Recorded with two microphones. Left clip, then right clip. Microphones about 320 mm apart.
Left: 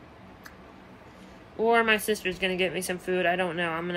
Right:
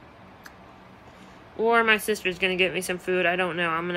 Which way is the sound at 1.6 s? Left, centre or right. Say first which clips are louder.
Right 2 dB; centre.